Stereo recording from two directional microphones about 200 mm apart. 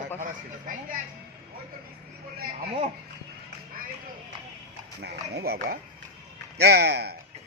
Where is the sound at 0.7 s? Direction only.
40° right (ahead or behind).